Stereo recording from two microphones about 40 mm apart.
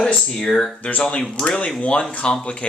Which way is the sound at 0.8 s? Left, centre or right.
Left.